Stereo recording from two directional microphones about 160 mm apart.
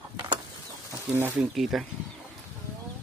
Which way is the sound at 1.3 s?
Centre (ahead or behind).